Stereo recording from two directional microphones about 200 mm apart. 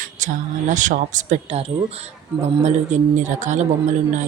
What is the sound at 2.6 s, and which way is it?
Speech, 35° right (ahead or behind).